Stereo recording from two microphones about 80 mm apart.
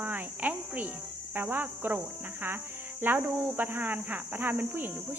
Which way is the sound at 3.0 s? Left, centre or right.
Right.